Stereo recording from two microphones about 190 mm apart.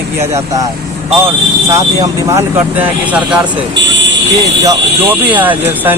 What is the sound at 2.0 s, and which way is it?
Speech, 10° right (ahead or behind).